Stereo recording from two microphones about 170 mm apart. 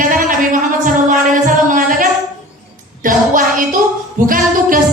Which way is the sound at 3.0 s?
50° right (ahead or behind).